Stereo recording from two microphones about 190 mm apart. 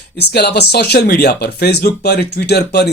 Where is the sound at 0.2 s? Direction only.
60° left (ahead or behind).